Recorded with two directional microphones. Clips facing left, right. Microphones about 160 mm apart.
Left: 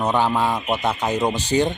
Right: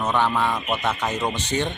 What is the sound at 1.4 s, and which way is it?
Speech, 35° left (ahead or behind).